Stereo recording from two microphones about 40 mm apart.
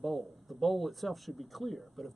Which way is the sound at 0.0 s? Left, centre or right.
Centre.